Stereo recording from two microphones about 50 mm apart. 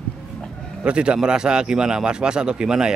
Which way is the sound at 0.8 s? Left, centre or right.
Right.